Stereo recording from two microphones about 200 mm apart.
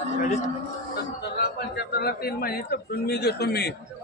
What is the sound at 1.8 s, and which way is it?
A man's voice, 50° left (ahead or behind).